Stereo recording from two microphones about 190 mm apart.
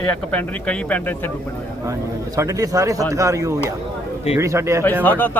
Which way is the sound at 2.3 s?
15° right (ahead or behind).